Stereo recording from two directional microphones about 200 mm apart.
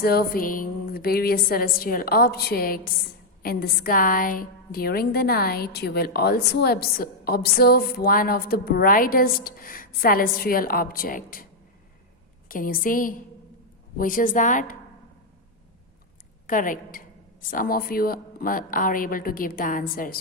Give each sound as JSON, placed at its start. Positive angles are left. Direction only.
{"t": 0.0, "sound": "a woman's voice", "side_deg": 50}
{"t": 12.5, "sound": "a woman's voice", "side_deg": 45}
{"t": 16.5, "sound": "a woman's voice", "side_deg": 40}